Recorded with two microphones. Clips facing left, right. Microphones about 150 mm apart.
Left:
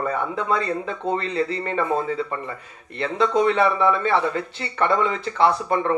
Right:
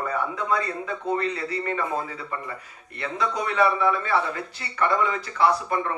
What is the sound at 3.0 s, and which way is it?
A man's voice, 25° left (ahead or behind).